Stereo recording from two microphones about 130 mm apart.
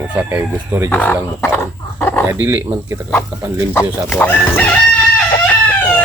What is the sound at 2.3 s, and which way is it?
Speech, 15° right (ahead or behind).